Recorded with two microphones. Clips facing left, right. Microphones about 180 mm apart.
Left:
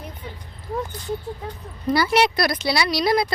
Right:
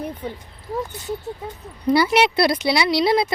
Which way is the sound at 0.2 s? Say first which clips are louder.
Right 7 dB; 40° right (ahead or behind).